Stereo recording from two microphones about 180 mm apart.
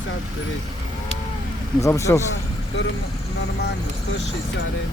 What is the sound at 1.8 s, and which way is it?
Speech, 15° left (ahead or behind).